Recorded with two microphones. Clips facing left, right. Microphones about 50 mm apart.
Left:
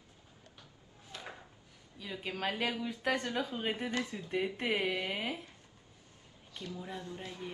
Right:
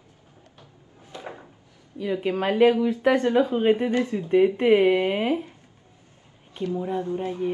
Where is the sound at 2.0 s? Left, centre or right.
Right.